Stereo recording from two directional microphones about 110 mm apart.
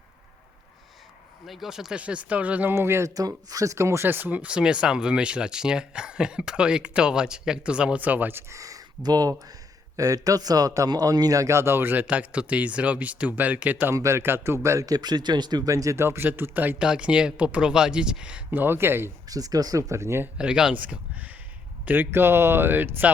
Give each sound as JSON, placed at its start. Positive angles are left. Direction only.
{"t": 1.5, "sound": "speech", "side_deg": -5}
{"t": 13.9, "sound": "speech", "side_deg": -25}
{"t": 19.3, "sound": "speech", "side_deg": -35}
{"t": 20.4, "sound": "speech", "side_deg": -5}
{"t": 21.8, "sound": "speech", "side_deg": -20}